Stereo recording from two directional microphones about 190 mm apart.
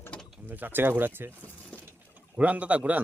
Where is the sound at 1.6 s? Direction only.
5° left (ahead or behind).